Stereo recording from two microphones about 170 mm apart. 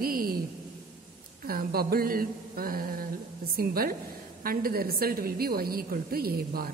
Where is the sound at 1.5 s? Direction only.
60° right (ahead or behind).